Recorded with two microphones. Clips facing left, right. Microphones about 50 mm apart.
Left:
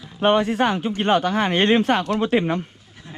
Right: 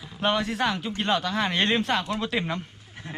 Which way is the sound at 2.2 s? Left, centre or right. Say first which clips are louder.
Left 8 dB; left.